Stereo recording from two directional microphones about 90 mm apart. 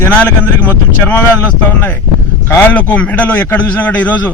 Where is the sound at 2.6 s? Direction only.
15° left (ahead or behind).